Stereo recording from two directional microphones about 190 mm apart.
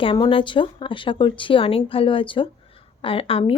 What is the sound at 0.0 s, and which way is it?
Speech, 25° left (ahead or behind).